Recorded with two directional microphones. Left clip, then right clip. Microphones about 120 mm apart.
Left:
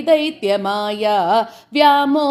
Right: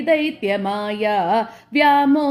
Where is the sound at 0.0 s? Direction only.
35° left (ahead or behind).